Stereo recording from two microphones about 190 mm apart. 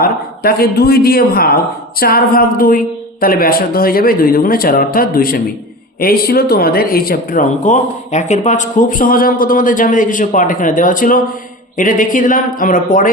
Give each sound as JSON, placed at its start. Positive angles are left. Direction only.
{"t": 0.0, "sound": "a man's voice", "side_deg": 55}